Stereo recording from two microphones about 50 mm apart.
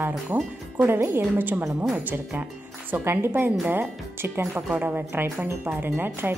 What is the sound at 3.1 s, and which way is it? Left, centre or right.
Speech, right.